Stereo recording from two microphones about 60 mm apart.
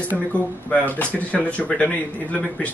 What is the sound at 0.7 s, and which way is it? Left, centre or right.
Speech, left.